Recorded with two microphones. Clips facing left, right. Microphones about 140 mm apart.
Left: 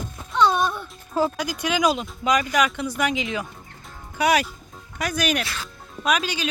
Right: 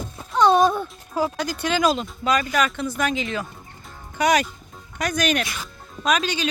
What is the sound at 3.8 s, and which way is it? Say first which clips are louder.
Music: right 1 dB; 10° left (ahead or behind).